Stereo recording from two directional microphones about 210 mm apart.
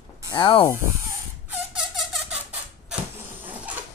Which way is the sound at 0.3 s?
20° left (ahead or behind).